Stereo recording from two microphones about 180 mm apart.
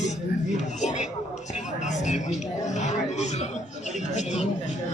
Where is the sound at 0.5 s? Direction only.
40° left (ahead or behind).